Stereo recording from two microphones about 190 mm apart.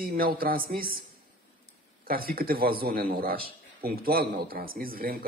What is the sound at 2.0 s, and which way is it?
A man's voice, 50° right (ahead or behind).